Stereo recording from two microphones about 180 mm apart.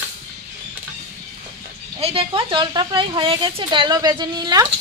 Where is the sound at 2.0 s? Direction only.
30° right (ahead or behind).